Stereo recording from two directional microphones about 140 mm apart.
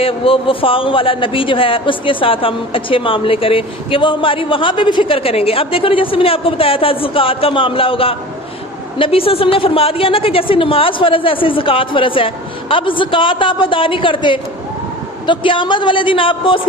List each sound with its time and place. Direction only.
0.0 s a man's voice: 40° left (ahead or behind)